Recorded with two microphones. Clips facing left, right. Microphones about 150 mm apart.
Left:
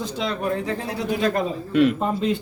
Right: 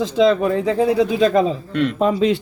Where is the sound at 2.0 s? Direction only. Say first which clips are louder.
Right 6 dB; 90° right.